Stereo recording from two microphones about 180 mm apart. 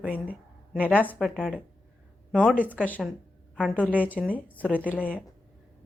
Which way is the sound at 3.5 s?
5° right (ahead or behind).